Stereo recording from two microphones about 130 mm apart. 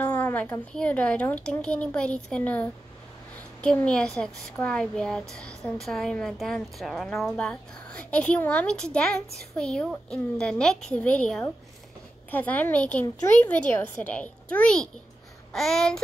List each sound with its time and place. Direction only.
0.0 s a woman's voice: 15° left (ahead or behind)